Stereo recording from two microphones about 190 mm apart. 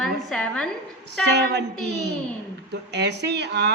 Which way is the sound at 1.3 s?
65° right (ahead or behind).